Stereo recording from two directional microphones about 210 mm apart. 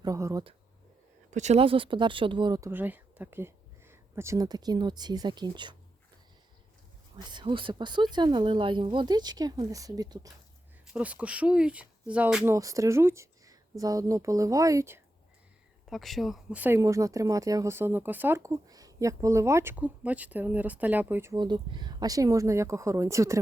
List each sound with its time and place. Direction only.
0.0 s speech: 15° right (ahead or behind)
1.3 s speech: 35° right (ahead or behind)
7.3 s speech: 25° right (ahead or behind)
10.9 s speech: 5° right (ahead or behind)
15.9 s speech: centre (ahead or behind)